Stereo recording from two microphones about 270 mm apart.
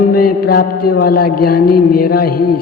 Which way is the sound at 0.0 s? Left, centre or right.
Left.